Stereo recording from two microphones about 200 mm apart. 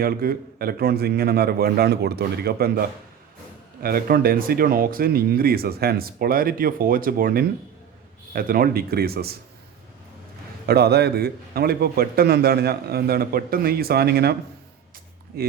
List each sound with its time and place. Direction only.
0.0 s a man's voice: 50° right (ahead or behind)
10.7 s a man's voice: 55° right (ahead or behind)
15.3 s a man's voice: 50° right (ahead or behind)